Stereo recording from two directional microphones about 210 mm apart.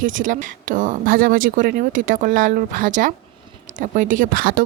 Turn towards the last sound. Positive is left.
turn(degrees=-45)  # may be behind; listen again after turning